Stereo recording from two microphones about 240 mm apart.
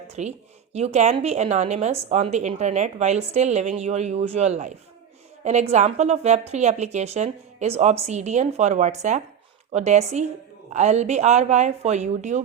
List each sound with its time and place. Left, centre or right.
0.1 s a woman's voice: right